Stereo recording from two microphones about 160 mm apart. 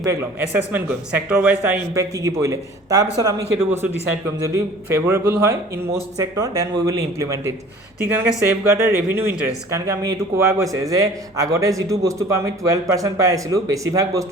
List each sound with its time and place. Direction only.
0.0 s speech: 15° right (ahead or behind)
2.0 s a man's voice: 20° right (ahead or behind)
3.6 s a man's voice: 10° right (ahead or behind)